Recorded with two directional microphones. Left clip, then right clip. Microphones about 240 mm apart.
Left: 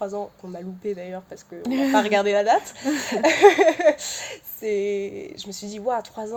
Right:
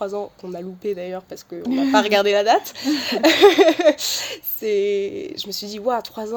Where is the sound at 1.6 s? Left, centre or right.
Centre.